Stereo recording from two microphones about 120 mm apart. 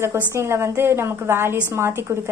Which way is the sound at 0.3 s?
20° right (ahead or behind).